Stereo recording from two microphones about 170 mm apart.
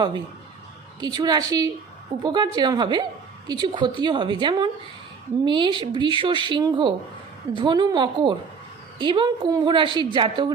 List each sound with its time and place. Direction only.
0.9 s a woman's voice: 25° right (ahead or behind)